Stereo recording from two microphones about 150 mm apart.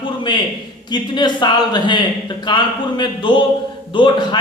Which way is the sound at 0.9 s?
30° left (ahead or behind).